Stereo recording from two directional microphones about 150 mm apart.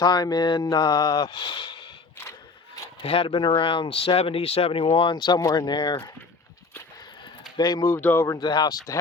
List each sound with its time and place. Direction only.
0.0 s speech: 30° left (ahead or behind)
2.7 s zipper: 25° left (ahead or behind)
3.1 s speech: 35° left (ahead or behind)
7.5 s speech: 30° left (ahead or behind)
7.9 s speech: 15° left (ahead or behind)